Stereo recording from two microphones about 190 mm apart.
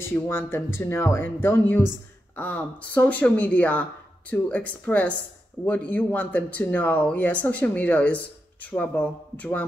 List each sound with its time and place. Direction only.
0.0 s speech: 15° left (ahead or behind)